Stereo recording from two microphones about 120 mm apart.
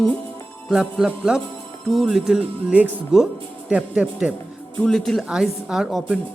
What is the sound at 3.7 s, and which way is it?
Music, 10° right (ahead or behind).